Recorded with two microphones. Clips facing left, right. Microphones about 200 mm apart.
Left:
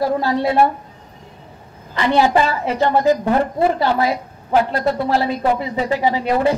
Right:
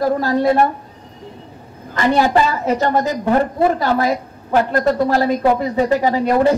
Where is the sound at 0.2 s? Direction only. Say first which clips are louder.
Right 2 dB; 45° right (ahead or behind).